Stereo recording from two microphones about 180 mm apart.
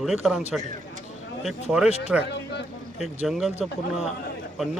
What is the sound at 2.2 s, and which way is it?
Speech, 70° left (ahead or behind).